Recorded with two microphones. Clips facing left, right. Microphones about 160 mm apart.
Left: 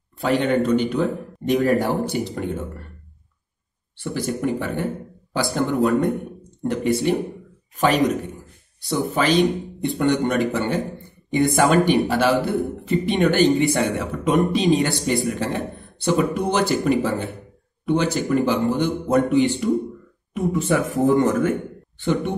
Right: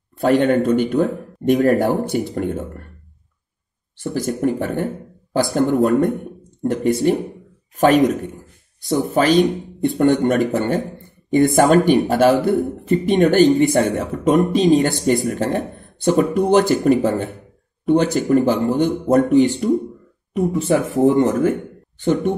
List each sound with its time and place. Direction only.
0.2 s speech: 45° right (ahead or behind)
3.9 s a man's voice: 40° right (ahead or behind)